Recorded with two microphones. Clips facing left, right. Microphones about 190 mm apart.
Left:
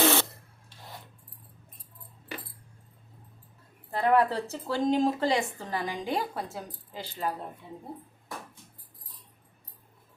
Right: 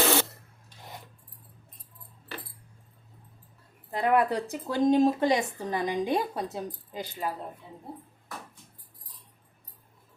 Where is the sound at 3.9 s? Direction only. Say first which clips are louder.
Even; 15° right (ahead or behind).